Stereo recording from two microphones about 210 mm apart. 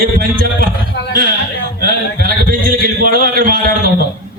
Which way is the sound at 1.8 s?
45° right (ahead or behind).